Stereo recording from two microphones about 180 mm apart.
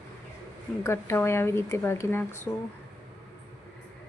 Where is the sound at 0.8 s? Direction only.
15° left (ahead or behind).